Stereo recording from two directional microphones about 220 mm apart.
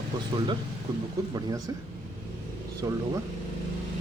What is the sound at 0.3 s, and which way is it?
Speech, 20° right (ahead or behind).